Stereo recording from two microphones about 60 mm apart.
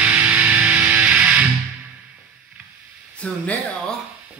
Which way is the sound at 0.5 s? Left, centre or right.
Right.